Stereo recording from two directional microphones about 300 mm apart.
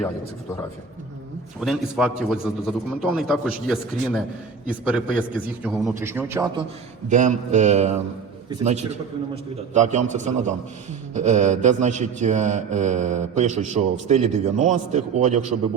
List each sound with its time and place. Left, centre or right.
1.6 s a man's voice: centre
7.1 s mantra: right
8.4 s a man's voice: centre
8.9 s mantra: right